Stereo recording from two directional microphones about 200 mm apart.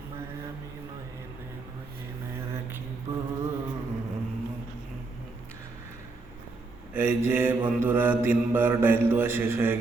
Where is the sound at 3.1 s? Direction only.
15° right (ahead or behind).